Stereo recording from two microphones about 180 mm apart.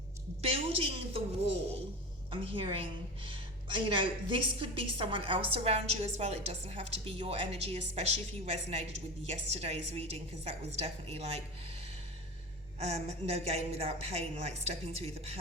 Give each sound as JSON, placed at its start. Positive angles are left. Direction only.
{"t": 0.4, "sound": "a woman's voice", "side_deg": -30}
{"t": 2.3, "sound": "a woman's voice", "side_deg": -30}